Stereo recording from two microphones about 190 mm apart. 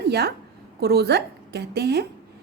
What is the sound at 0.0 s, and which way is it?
A woman's voice, 60° right (ahead or behind).